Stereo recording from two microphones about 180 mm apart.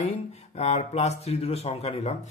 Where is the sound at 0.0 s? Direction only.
40° left (ahead or behind).